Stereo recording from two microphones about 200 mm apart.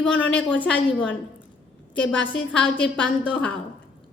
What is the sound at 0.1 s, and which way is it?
Speech, 65° left (ahead or behind).